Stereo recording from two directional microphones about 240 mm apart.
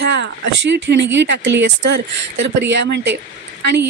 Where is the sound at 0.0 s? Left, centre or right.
Right.